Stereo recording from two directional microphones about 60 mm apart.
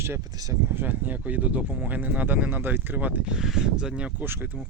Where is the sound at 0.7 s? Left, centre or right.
Right.